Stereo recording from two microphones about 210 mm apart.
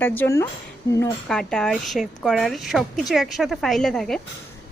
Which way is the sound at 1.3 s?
5° left (ahead or behind).